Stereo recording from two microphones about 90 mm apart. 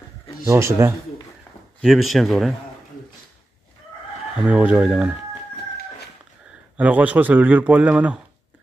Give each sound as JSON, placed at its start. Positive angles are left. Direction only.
{"t": 0.5, "sound": "speech", "side_deg": -30}
{"t": 1.8, "sound": "speech", "side_deg": 0}
{"t": 4.4, "sound": "speech", "side_deg": -15}
{"t": 6.8, "sound": "speech", "side_deg": -15}